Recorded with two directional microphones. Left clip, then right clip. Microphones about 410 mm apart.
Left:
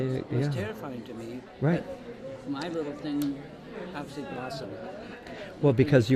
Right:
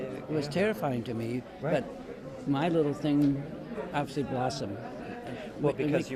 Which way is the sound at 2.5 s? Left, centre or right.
Right.